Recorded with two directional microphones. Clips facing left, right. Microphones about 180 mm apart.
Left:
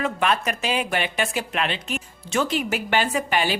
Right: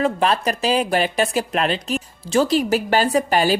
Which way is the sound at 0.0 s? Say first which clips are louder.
Right 4 dB; 35° right (ahead or behind).